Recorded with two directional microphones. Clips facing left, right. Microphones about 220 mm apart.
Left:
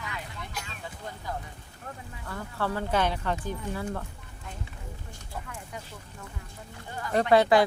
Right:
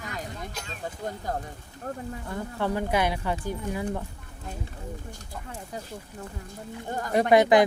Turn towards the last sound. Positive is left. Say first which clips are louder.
# right 2 dB
turn(degrees=-20)  # may be behind; listen again after turning